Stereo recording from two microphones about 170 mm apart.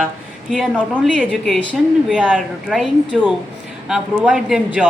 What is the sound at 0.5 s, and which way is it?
Speech, centre (ahead or behind).